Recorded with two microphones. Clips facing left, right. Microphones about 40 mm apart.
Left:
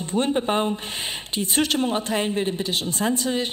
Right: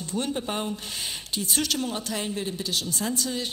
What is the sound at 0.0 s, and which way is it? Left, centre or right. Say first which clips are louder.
A woman's voice: left 7 dB; left.